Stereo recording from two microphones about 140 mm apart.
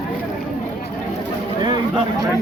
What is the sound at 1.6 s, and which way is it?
Speech, 30° right (ahead or behind).